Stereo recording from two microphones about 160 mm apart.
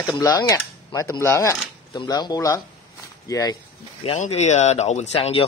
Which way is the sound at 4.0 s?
40° left (ahead or behind).